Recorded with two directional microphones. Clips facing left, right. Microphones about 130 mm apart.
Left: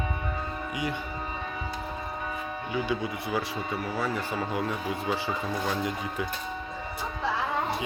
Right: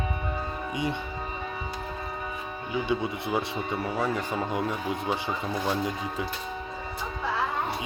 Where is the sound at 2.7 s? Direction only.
25° right (ahead or behind).